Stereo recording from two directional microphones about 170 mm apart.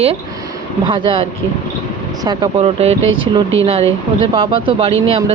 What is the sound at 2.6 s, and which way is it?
Speech, 40° right (ahead or behind).